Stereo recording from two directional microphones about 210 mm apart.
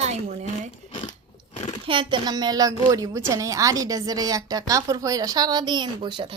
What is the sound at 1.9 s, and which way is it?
A woman's voice, 25° right (ahead or behind).